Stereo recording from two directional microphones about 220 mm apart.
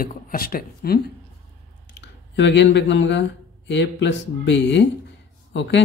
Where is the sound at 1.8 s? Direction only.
55° left (ahead or behind).